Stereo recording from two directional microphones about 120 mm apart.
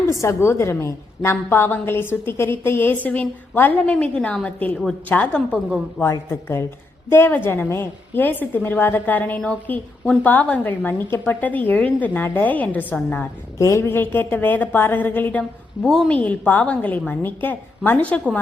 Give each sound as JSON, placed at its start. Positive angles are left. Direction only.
{"t": 0.1, "sound": "a woman's voice", "side_deg": 25}
{"t": 6.0, "sound": "a woman's voice", "side_deg": 25}
{"t": 15.9, "sound": "a woman's voice", "side_deg": 0}